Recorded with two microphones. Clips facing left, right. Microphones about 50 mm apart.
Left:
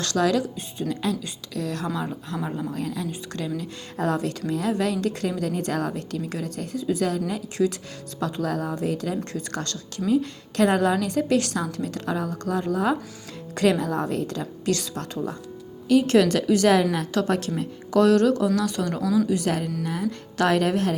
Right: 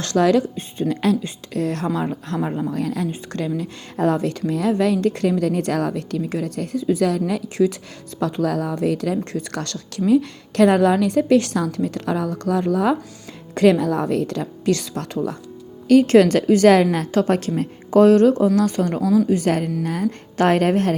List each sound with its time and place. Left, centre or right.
0.0 s a woman's voice: right
2.7 s a woman's voice: right
6.2 s a woman's voice: right
7.5 s a woman's voice: right
8.2 s a woman's voice: right
17.9 s a woman's voice: right